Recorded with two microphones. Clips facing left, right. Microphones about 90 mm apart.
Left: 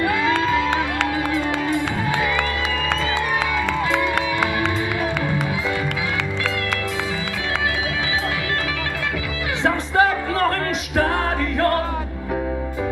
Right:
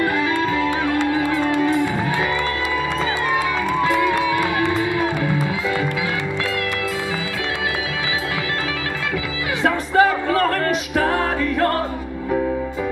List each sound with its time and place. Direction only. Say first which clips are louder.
0.4 s music: even; 20° left (ahead or behind)
1.8 s music: right 2 dB; 20° left (ahead or behind)
9.9 s music: right 3 dB; 25° right (ahead or behind)